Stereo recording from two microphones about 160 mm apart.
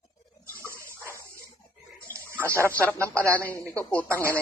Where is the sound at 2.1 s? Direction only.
15° right (ahead or behind).